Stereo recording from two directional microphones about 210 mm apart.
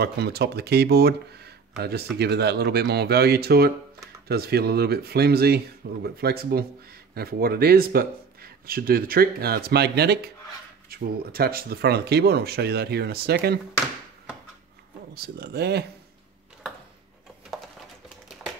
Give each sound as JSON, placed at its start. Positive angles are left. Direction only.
{"t": 0.0, "sound": "speech", "side_deg": -50}
{"t": 15.1, "sound": "speech", "side_deg": -50}